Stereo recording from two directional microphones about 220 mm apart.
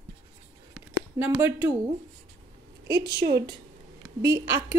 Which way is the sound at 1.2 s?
10° right (ahead or behind).